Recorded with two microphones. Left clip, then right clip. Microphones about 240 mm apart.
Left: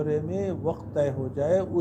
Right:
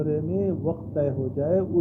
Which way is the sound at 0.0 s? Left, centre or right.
Left.